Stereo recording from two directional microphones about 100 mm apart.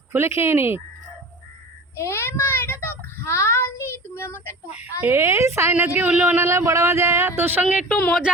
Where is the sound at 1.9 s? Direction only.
25° left (ahead or behind).